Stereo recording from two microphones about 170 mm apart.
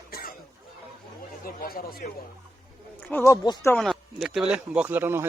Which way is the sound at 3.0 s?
10° left (ahead or behind).